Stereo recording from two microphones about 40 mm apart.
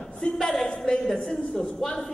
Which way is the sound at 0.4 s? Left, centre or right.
Centre.